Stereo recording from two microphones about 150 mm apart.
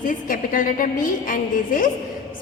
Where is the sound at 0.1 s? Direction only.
65° left (ahead or behind).